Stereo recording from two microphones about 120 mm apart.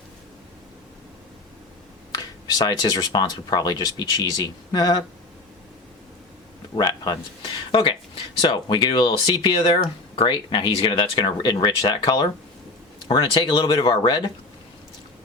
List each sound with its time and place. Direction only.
2.1 s speech: 35° left (ahead or behind)
6.7 s speech: 35° left (ahead or behind)